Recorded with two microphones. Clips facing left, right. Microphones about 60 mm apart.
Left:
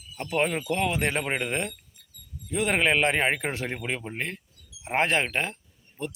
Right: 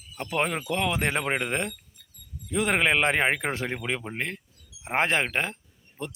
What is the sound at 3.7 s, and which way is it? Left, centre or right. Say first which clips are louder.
Speech: right 1 dB; right.